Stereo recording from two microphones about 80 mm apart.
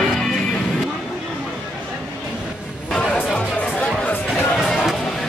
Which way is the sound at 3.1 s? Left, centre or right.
Centre.